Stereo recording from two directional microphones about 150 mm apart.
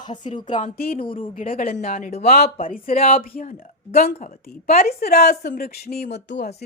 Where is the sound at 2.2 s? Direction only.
85° left.